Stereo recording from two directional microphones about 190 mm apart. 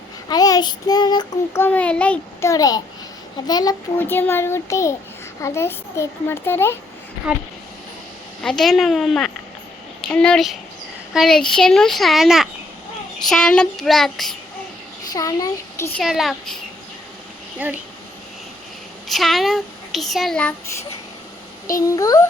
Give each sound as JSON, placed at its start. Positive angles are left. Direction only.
{"t": 0.3, "sound": "child singing", "side_deg": 20}
{"t": 1.6, "sound": "a child's voice", "side_deg": 5}
{"t": 8.4, "sound": "a child's voice", "side_deg": 5}
{"t": 15.1, "sound": "a child's voice", "side_deg": 20}
{"t": 15.9, "sound": "a child's voice", "side_deg": 0}
{"t": 17.6, "sound": "speech", "side_deg": -10}
{"t": 19.0, "sound": "a child's voice", "side_deg": 0}
{"t": 21.8, "sound": "a child's voice", "side_deg": 15}